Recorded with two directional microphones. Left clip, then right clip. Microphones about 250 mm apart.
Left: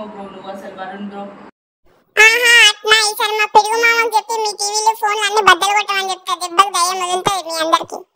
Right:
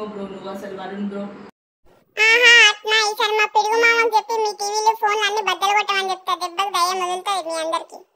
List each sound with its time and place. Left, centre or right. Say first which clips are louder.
2.5 s a child's voice: left 3 dB; centre